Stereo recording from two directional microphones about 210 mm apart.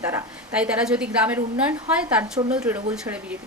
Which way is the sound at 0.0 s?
10° right (ahead or behind).